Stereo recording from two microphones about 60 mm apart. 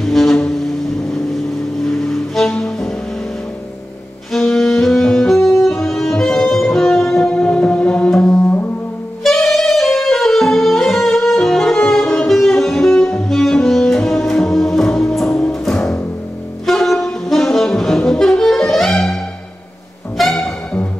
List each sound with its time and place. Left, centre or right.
0.0 s music: centre
1.9 s music: centre
4.3 s music: centre
9.2 s saxophone: centre
13.0 s music: centre
15.2 s music: centre
16.6 s saxophone: centre
20.2 s music: centre